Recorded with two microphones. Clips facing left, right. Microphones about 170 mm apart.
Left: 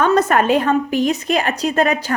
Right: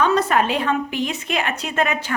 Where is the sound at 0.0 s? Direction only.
50° left (ahead or behind).